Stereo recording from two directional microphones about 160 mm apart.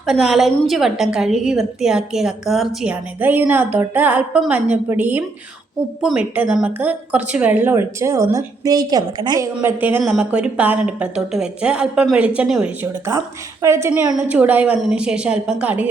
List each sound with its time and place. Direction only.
0.0 s a woman's voice: centre (ahead or behind); by 9.6 s 25° right (ahead or behind)
9.6 s a woman's voice: 15° right (ahead or behind)
13.1 s a woman's voice: 15° right (ahead or behind)